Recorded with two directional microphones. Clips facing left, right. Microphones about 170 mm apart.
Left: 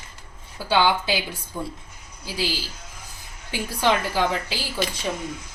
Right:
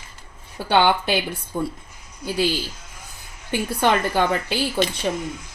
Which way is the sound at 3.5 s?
60° right (ahead or behind).